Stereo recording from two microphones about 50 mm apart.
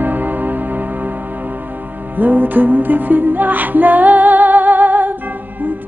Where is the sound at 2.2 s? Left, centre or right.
Right.